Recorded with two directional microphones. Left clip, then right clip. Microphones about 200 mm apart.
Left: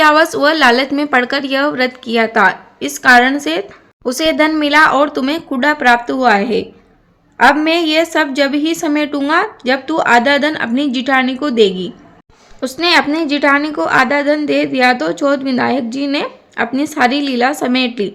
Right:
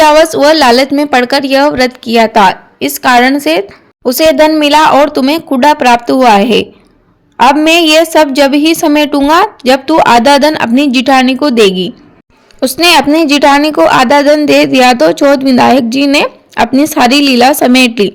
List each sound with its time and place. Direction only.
0.0 s a woman's voice: 25° right (ahead or behind)